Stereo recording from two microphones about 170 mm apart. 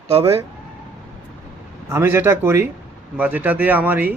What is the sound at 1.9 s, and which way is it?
Speech, 15° right (ahead or behind).